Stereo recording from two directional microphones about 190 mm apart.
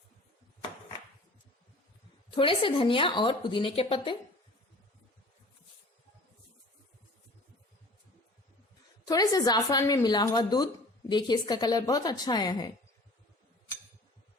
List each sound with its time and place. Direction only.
2.3 s speech: 25° left (ahead or behind)
9.0 s speech: 20° left (ahead or behind)